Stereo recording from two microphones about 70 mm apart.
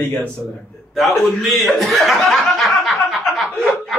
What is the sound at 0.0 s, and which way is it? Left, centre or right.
Speech, left.